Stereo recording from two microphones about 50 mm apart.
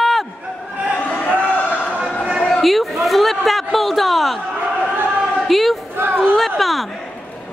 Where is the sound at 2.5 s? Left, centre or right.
Centre.